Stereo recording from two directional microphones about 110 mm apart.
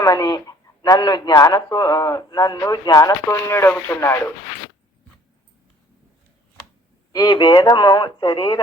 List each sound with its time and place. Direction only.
0.0 s a man's voice: 35° left (ahead or behind)
3.2 s speech: 25° left (ahead or behind)
7.1 s a man's voice: 40° left (ahead or behind)